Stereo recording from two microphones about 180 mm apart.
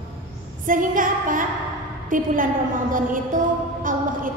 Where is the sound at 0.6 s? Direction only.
50° right (ahead or behind).